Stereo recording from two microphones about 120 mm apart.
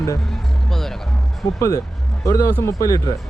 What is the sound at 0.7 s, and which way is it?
Speech, 5° left (ahead or behind).